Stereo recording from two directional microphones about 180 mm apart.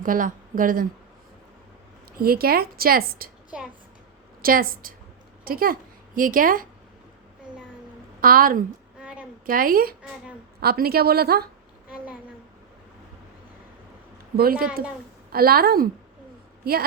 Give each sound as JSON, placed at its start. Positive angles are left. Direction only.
{"t": 0.0, "sound": "a woman's voice", "side_deg": -50}
{"t": 2.1, "sound": "a woman's voice", "side_deg": -55}
{"t": 4.4, "sound": "a woman's voice", "side_deg": -55}
{"t": 8.2, "sound": "a woman's voice", "side_deg": -55}
{"t": 9.0, "sound": "a sound", "side_deg": -5}
{"t": 9.5, "sound": "a woman's voice", "side_deg": -55}
{"t": 11.9, "sound": "a sound", "side_deg": -10}
{"t": 14.3, "sound": "a woman's voice", "side_deg": -55}